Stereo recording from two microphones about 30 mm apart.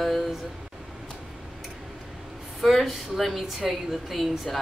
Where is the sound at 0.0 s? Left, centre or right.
Centre.